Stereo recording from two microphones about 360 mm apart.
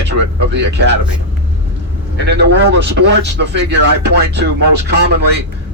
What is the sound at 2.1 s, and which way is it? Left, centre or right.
A man's voice, right.